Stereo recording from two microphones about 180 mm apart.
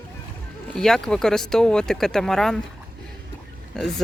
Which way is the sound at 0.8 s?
5° left (ahead or behind).